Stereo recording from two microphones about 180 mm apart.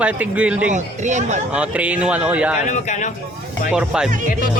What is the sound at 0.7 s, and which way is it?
Speech, 40° right (ahead or behind).